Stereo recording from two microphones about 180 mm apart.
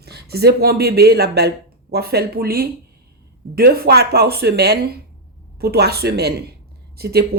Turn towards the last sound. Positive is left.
turn(degrees=-60)  # may be behind; listen again after turning